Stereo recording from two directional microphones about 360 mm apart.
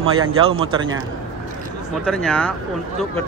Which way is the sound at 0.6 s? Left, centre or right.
Right.